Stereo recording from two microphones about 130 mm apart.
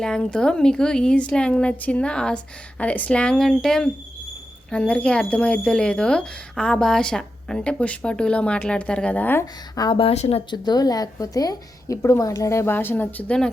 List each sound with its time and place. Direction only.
0.0 s speech: 5° left (ahead or behind)
9.7 s speech: 30° left (ahead or behind)
10.0 s speech: 50° left (ahead or behind)
10.5 s a woman's voice: 30° left (ahead or behind); by 13.5 s 5° left (ahead or behind)